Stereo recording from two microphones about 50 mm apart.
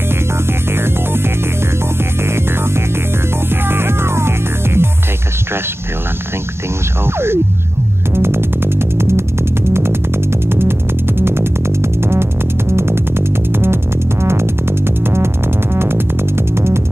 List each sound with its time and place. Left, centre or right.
0.7 s music: right
8.2 s music: right
11.2 s music: right
14.2 s music: right